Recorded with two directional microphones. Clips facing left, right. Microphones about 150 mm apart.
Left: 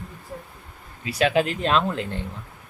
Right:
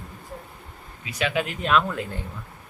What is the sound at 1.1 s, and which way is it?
Speech, 35° left (ahead or behind).